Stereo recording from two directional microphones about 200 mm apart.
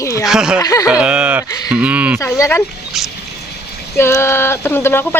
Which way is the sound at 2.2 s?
15° left (ahead or behind).